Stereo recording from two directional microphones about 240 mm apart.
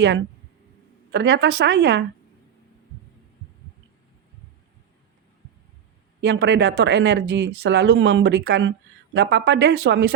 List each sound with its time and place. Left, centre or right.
1.1 s speech: right
6.2 s speech: right